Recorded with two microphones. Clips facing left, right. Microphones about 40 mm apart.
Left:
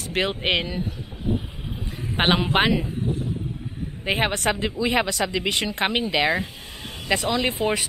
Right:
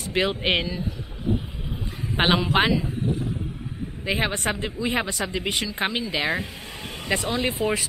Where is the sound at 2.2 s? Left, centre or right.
Left.